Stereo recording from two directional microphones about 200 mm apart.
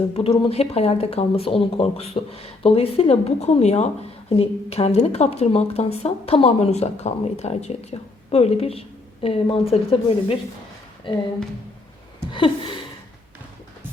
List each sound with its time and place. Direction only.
0.1 s a woman's voice: 30° left (ahead or behind)
12.3 s a woman's voice: 25° left (ahead or behind)